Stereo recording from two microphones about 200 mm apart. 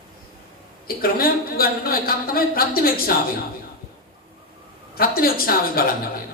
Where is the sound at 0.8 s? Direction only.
50° left (ahead or behind).